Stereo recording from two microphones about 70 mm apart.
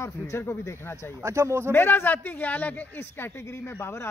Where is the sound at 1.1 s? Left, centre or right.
Right.